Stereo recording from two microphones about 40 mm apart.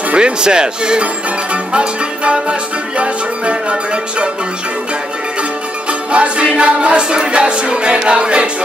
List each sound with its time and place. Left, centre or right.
0.1 s music: right
5.9 s music: right